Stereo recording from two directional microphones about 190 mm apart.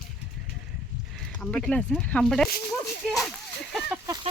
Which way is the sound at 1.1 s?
5° left (ahead or behind).